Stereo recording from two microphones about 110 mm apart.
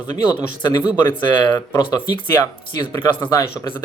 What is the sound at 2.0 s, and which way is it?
Speech, 40° left (ahead or behind).